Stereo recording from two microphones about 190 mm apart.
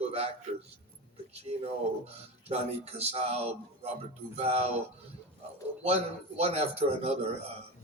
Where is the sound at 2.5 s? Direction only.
35° right (ahead or behind).